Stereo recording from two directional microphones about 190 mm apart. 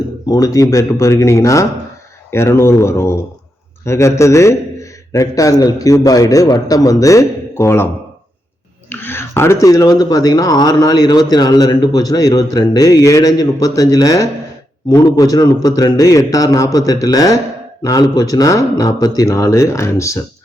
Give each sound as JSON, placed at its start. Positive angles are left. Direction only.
{"t": 0.3, "sound": "a man's voice", "side_deg": 20}
{"t": 8.9, "sound": "a man's voice", "side_deg": 10}